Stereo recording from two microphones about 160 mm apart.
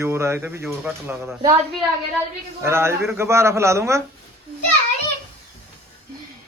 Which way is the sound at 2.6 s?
15° right (ahead or behind).